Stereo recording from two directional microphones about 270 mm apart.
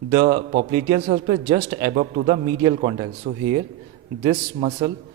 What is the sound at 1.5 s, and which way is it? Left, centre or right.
Speech, centre.